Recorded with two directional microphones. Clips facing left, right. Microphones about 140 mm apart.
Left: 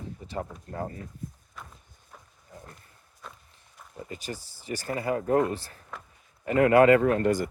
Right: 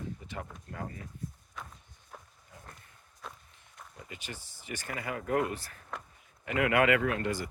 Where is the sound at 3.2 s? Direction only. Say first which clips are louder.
Even; centre (ahead or behind).